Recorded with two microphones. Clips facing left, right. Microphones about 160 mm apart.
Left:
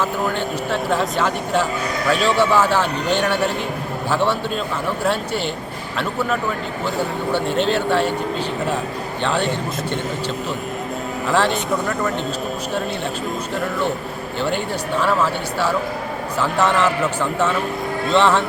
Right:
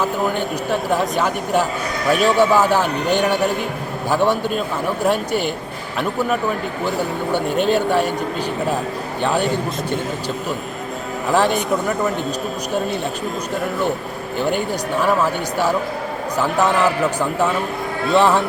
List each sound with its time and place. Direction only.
0.0 s speech: 15° right (ahead or behind)
7.3 s speech: 15° right (ahead or behind)
9.2 s speech: 10° right (ahead or behind)
11.3 s speech: 15° right (ahead or behind)
15.0 s speech: 15° right (ahead or behind)